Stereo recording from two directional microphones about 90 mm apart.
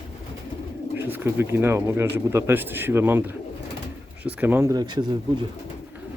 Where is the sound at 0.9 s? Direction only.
25° right (ahead or behind).